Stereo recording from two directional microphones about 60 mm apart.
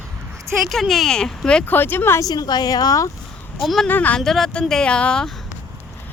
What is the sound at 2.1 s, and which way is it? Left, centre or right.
Speech, left.